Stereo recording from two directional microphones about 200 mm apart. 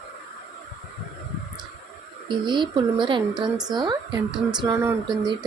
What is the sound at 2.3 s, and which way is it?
Speech, 25° right (ahead or behind).